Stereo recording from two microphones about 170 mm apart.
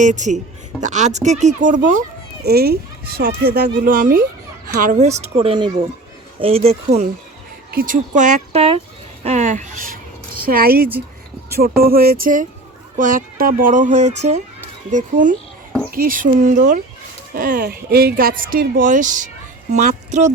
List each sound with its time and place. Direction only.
0.0 s speech: 45° right (ahead or behind)
2.4 s speech: 65° right (ahead or behind); by 5.1 s 45° right (ahead or behind)
5.4 s speech: 30° right (ahead or behind)
7.7 s speech: 55° right (ahead or behind); by 8.8 s 35° right (ahead or behind)
9.2 s a sound: 40° right (ahead or behind); by 10.8 s 65° right (ahead or behind)
11.5 s speech: 65° right (ahead or behind); by 20.3 s 45° right (ahead or behind)